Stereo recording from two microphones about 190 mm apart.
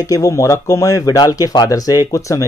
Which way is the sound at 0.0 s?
15° left (ahead or behind).